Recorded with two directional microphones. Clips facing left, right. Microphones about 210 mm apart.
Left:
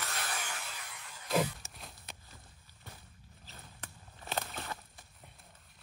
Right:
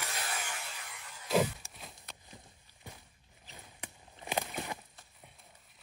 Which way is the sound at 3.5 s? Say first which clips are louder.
Right 2 dB; 15° right (ahead or behind).